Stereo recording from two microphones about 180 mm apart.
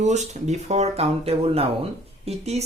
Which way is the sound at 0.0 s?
40° right (ahead or behind).